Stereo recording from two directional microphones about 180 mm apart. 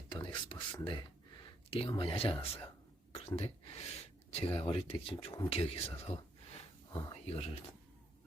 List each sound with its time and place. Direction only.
0.4 s speech: 25° left (ahead or behind)